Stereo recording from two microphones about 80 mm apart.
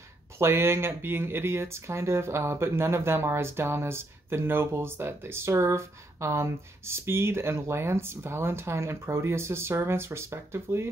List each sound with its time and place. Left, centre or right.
0.4 s speech: right